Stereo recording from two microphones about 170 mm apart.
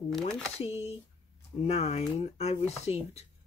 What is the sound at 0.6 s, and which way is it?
Speech, 35° left (ahead or behind).